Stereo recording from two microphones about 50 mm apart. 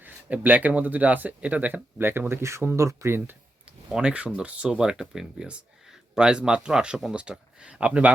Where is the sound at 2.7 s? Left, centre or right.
Right.